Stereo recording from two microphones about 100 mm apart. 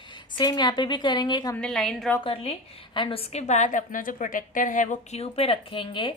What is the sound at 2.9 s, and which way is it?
Speech, 60° left (ahead or behind).